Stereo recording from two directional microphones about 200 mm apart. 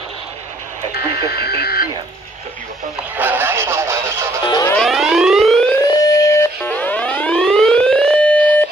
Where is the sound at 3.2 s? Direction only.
10° right (ahead or behind).